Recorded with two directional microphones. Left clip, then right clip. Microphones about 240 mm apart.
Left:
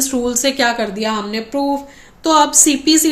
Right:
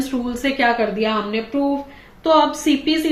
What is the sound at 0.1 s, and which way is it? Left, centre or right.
A woman's voice, left.